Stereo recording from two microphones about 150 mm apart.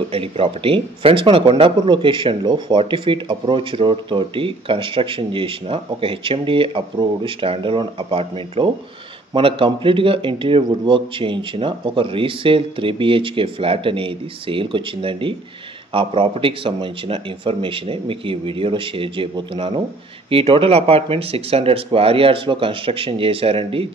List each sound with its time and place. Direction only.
0.1 s speech: 35° right (ahead or behind)